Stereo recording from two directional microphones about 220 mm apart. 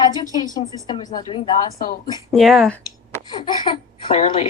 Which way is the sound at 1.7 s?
40° left (ahead or behind).